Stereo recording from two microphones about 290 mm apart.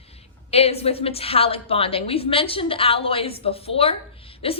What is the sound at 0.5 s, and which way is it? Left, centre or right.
A woman's voice, left.